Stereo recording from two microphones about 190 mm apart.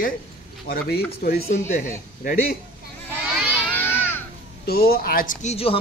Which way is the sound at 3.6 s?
10° left (ahead or behind).